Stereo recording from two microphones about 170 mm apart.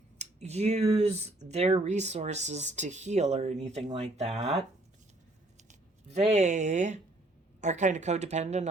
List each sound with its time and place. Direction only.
0.2 s speech: 40° right (ahead or behind)
5.6 s speech: 40° right (ahead or behind)